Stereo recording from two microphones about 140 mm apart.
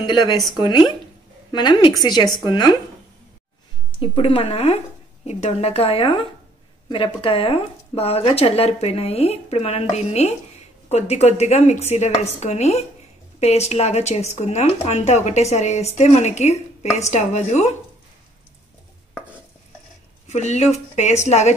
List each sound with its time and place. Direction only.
0.0 s a woman's voice: 35° left (ahead or behind)
4.0 s speech: 40° left (ahead or behind)
20.2 s speech: 55° left (ahead or behind)